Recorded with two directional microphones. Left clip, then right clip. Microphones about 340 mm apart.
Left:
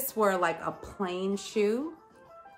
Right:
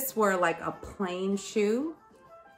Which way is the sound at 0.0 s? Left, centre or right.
Centre.